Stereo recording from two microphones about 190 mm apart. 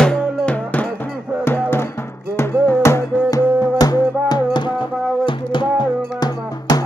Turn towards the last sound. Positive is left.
turn(degrees=20)  # may be behind; listen again after turning